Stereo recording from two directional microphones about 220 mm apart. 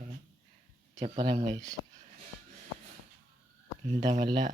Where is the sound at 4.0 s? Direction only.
30° right (ahead or behind).